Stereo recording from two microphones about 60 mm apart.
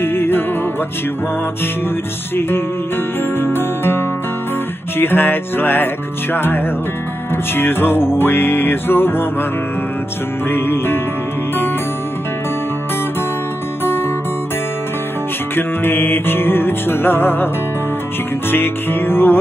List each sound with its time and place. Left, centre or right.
0.0 s music: left
3.3 s music: left
10.5 s music: left
15.5 s music: left
18.5 s music: left